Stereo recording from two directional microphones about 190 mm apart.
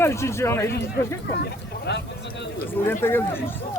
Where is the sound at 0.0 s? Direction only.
15° left (ahead or behind).